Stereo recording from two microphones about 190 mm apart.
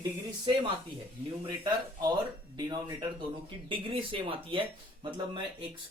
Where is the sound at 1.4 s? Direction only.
20° right (ahead or behind).